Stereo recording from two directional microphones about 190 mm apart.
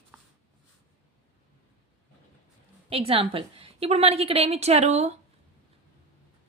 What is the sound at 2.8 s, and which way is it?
Speech, 30° right (ahead or behind).